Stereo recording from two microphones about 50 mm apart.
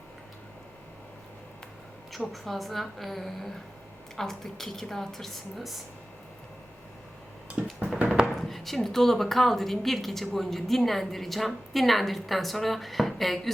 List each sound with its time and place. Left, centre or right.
2.1 s a woman's voice: centre
7.6 s music: right
8.4 s a woman's voice: centre